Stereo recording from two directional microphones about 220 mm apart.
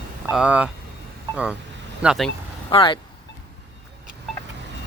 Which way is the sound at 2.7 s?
20° left (ahead or behind).